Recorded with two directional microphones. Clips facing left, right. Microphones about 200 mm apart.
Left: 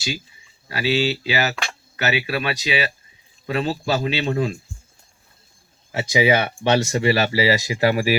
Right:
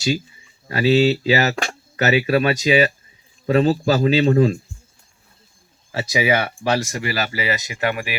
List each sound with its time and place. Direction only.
0.7 s speech: 40° right (ahead or behind)
5.9 s speech: 20° left (ahead or behind)